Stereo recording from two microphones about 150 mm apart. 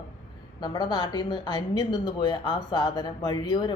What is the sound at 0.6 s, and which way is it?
A woman's voice, 30° left (ahead or behind).